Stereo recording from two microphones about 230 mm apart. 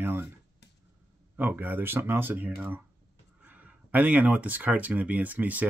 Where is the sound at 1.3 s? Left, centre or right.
Centre.